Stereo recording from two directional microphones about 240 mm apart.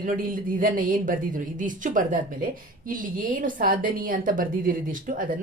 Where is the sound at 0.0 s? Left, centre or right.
Right.